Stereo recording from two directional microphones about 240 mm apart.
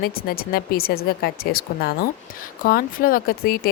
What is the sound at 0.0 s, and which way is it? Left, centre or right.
Speech, left.